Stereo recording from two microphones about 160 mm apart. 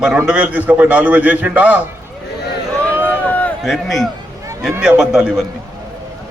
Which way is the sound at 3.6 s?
Centre (ahead or behind).